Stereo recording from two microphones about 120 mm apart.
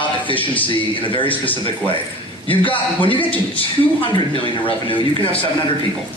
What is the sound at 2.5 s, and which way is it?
Speech, 45° left (ahead or behind).